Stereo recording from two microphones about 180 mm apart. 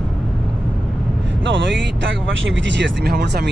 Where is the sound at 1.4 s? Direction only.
90° right.